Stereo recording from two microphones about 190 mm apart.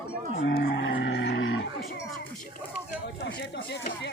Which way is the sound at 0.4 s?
60° left (ahead or behind).